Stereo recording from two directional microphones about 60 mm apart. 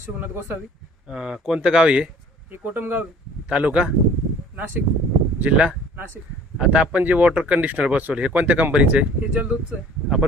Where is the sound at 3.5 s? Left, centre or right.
Right.